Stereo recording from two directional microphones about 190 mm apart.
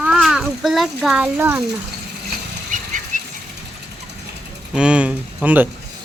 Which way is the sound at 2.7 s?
45° right (ahead or behind).